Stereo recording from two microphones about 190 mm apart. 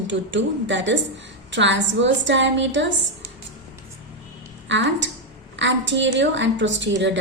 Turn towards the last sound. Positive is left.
turn(degrees=-70)  # may be behind; listen again after turning